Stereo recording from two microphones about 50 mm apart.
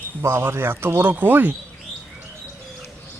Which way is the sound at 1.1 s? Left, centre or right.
Right.